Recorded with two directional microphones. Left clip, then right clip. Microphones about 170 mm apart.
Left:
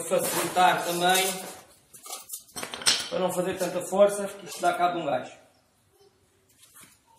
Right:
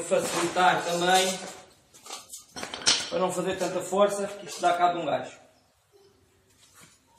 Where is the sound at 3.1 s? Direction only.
40° left (ahead or behind).